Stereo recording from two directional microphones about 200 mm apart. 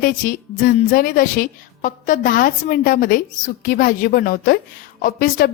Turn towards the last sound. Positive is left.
turn(degrees=45)  # may be behind; listen again after turning